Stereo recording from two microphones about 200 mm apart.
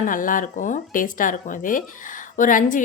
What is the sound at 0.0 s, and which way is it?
Speech, 40° left (ahead or behind).